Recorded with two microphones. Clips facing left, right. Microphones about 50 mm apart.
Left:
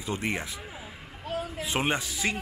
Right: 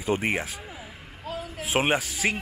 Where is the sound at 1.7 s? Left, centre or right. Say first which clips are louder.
Right 5 dB; right.